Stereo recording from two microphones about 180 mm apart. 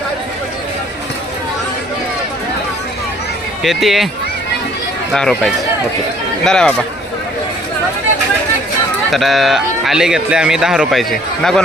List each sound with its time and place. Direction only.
3.6 s speech: centre (ahead or behind)
5.1 s speech: centre (ahead or behind)
9.1 s speech: centre (ahead or behind)